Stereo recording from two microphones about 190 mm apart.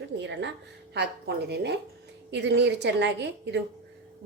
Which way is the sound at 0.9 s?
60° right (ahead or behind).